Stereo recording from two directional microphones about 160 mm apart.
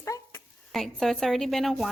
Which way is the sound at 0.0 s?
20° left (ahead or behind).